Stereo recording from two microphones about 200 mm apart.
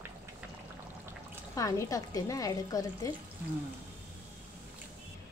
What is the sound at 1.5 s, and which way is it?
A woman's voice, 15° left (ahead or behind).